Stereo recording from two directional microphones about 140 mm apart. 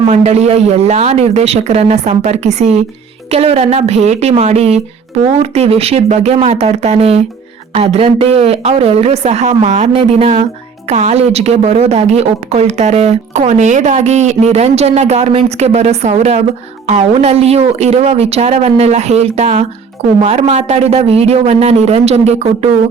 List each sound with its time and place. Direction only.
0.0 s a woman's voice: 50° right (ahead or behind)